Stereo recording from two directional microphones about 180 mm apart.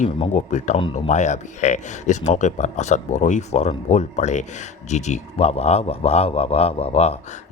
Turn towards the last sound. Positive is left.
turn(degrees=35)  # may be behind; listen again after turning